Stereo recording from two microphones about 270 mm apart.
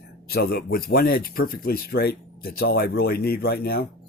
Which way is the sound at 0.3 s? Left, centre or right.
Left.